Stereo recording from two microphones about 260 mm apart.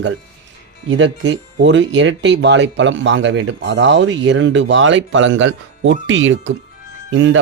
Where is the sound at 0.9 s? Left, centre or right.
Right.